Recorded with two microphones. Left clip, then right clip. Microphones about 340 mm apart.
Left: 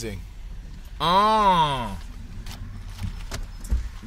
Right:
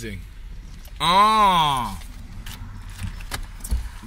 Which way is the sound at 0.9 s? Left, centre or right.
Centre.